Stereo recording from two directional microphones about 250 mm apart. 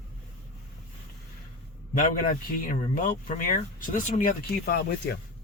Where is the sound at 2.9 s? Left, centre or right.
Left.